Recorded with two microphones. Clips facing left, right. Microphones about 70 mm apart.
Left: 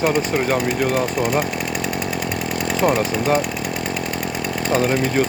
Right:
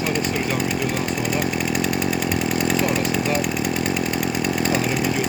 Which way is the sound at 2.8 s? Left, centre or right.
Left.